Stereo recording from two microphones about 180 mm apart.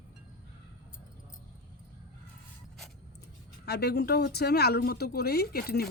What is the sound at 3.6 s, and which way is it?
Speech, 65° left (ahead or behind).